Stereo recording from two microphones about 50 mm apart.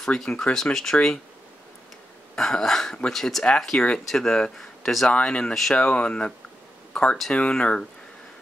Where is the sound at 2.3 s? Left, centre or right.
Centre.